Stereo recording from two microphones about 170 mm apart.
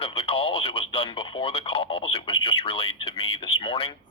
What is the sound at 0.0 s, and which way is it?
Speech, 30° left (ahead or behind).